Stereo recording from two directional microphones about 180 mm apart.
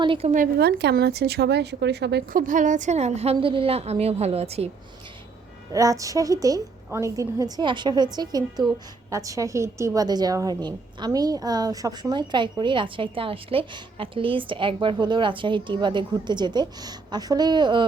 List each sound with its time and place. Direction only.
0.0 s a woman's voice: 30° right (ahead or behind)
0.6 s speech: 65° right (ahead or behind)
2.5 s a woman's voice: 45° right (ahead or behind)
5.7 s a woman's voice: 20° right (ahead or behind)